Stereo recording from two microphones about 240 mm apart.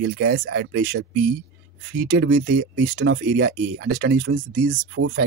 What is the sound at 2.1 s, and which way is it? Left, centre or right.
Speech, right.